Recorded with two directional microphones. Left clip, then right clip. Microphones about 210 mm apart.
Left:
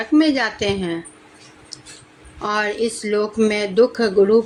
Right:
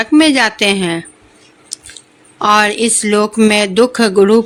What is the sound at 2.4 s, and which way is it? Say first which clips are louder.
Speech: right 10 dB; 40° right (ahead or behind).